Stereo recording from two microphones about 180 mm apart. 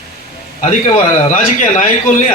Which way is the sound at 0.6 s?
40° left (ahead or behind).